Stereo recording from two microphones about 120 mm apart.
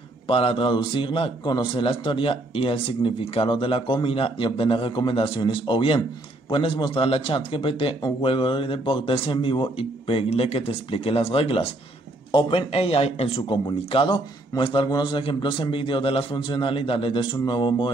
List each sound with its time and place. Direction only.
0.3 s a man's voice: 50° left (ahead or behind)